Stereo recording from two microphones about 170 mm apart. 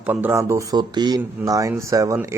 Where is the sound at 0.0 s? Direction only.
10° right (ahead or behind).